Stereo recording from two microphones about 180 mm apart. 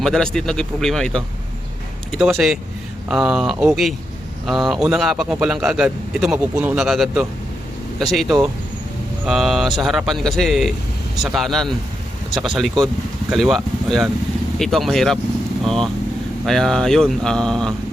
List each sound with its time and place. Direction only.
0.0 s a man's voice: 5° left (ahead or behind)